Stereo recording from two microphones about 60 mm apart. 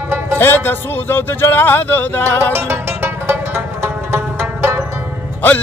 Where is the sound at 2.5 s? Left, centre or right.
Right.